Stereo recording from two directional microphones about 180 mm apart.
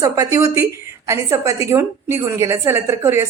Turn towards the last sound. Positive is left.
turn(degrees=-15)  # may be behind; listen again after turning